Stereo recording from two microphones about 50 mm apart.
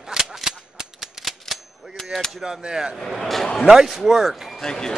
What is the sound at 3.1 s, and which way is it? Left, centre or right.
Speech, centre.